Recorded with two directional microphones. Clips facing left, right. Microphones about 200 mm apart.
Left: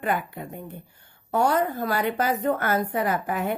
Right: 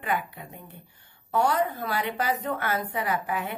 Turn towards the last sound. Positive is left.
turn(degrees=45)  # may be behind; listen again after turning